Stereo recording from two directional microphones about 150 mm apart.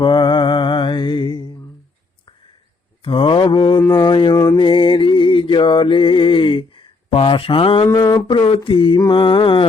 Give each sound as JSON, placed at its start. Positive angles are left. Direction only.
{"t": 0.0, "sound": "mantra", "side_deg": 30}
{"t": 3.0, "sound": "mantra", "side_deg": 35}
{"t": 7.9, "sound": "mantra", "side_deg": 25}